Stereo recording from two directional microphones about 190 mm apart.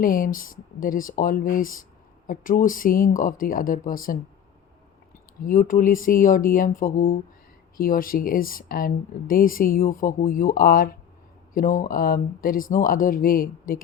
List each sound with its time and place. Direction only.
0.0 s speech: 45° left (ahead or behind)
5.4 s speech: 45° left (ahead or behind)